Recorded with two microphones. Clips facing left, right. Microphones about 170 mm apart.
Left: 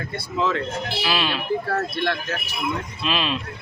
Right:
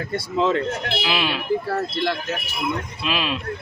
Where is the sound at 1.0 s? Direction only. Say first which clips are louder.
Even; 15° right (ahead or behind).